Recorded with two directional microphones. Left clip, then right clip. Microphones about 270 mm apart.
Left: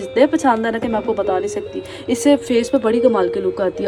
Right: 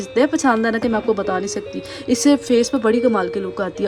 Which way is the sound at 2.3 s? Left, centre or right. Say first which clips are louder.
Left 3 dB; centre.